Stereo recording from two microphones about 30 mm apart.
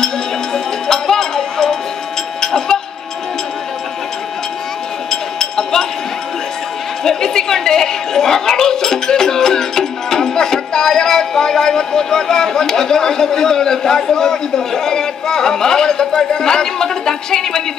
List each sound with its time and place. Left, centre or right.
0.0 s a sound: centre
5.1 s chink: centre
7.0 s a woman's voice: centre